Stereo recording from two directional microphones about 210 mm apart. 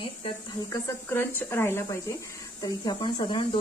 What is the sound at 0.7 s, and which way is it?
Speech, 10° left (ahead or behind).